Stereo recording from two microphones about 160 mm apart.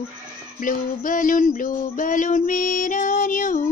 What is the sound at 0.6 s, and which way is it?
Music, 55° left (ahead or behind).